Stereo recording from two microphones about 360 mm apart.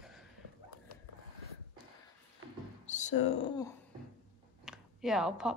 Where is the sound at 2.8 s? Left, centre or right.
Centre.